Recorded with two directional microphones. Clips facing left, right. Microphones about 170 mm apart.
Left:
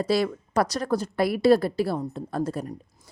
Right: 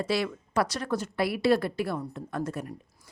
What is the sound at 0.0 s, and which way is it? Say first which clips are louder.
A woman's voice: left 5 dB; 40° left (ahead or behind).